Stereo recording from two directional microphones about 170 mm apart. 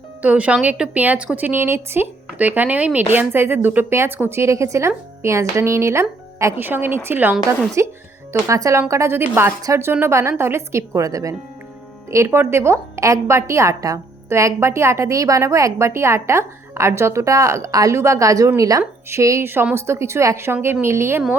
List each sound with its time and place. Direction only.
0.2 s a woman's voice: 10° right (ahead or behind)